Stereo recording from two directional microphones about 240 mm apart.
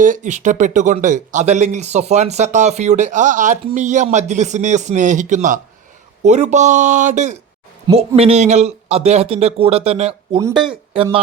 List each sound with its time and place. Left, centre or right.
0.0 s speech: right
10.5 s speech: centre
10.9 s speech: right